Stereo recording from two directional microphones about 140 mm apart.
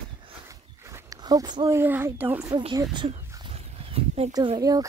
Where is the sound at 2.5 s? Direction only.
30° right (ahead or behind).